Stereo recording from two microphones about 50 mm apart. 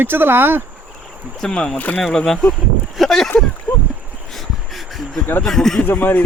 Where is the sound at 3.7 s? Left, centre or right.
Left.